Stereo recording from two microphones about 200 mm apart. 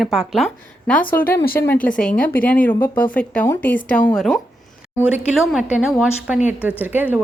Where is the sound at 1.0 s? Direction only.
45° left (ahead or behind).